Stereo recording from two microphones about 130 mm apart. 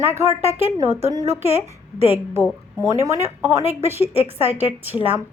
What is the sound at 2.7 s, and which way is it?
A woman's voice, 20° right (ahead or behind).